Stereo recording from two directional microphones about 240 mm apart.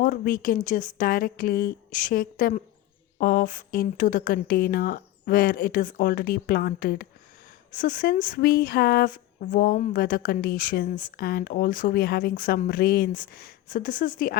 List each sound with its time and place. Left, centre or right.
0.0 s speech: left